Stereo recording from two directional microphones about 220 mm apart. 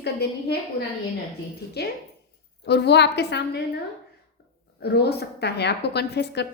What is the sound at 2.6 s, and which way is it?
A woman's voice, 50° left (ahead or behind).